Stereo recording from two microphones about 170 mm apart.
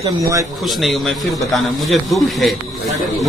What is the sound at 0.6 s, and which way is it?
A man's voice, centre (ahead or behind).